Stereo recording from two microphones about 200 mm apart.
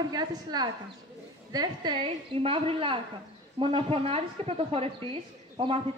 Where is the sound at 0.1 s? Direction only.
20° right (ahead or behind).